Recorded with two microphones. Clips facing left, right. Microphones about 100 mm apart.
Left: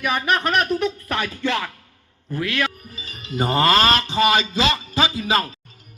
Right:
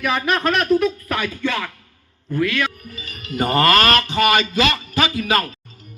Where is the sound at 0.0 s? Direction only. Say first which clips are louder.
Right 1 dB; 15° left (ahead or behind).